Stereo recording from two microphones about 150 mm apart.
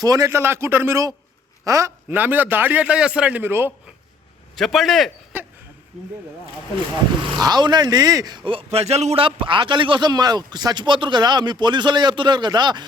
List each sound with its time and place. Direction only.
0.0 s a man's voice: 25° right (ahead or behind)
4.5 s a man's voice: centre (ahead or behind)
7.3 s speech: 25° right (ahead or behind)